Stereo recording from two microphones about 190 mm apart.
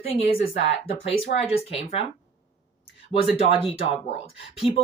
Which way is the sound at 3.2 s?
30° left (ahead or behind).